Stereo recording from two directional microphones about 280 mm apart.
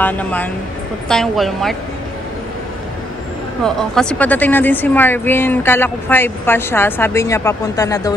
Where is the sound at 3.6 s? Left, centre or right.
Centre.